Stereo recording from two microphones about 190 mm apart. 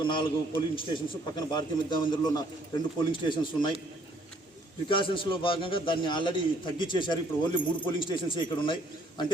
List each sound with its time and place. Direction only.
0.0 s a man's voice: 25° left (ahead or behind)
4.9 s a man's voice: 25° left (ahead or behind)